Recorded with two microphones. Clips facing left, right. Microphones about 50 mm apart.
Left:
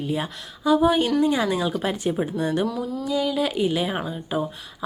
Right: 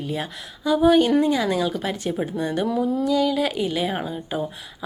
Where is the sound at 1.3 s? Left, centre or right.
Centre.